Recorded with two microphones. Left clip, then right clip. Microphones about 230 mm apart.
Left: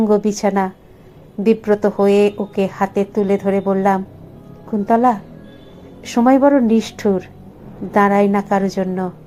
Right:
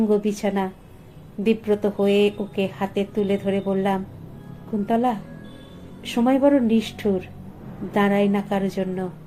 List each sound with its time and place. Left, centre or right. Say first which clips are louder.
0.0 s a woman's voice: left 6 dB; left